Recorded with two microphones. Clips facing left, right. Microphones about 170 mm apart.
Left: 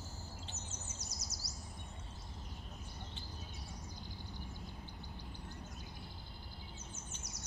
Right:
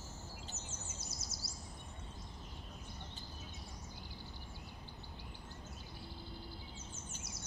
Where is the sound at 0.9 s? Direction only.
25° right (ahead or behind).